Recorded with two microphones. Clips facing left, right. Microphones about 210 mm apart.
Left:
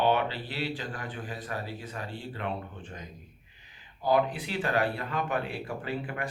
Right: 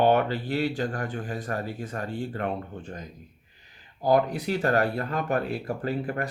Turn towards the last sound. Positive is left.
turn(degrees=-40)  # may be behind; listen again after turning